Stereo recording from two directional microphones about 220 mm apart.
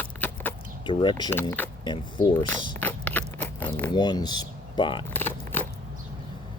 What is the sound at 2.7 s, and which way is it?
Biting, 10° left (ahead or behind).